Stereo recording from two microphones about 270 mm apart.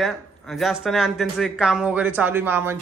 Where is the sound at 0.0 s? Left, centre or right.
Centre.